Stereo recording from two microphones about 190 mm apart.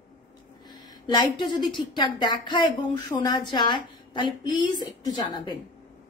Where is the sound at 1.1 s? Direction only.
25° left (ahead or behind).